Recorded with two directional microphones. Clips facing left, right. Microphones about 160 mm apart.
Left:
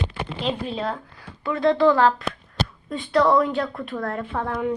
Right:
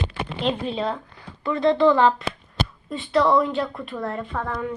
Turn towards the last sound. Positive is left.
turn(degrees=10)  # may be behind; listen again after turning